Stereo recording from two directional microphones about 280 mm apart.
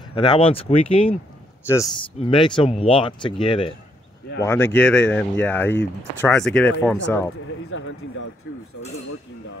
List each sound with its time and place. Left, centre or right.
0.1 s speech: centre
1.6 s speech: centre
7.7 s speech: left